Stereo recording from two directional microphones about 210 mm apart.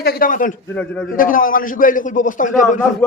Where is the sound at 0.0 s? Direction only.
45° left (ahead or behind).